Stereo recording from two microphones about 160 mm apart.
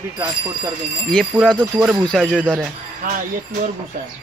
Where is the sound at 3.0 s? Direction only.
60° right (ahead or behind).